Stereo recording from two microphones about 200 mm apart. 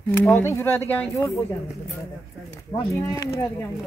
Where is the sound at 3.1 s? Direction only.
15° left (ahead or behind).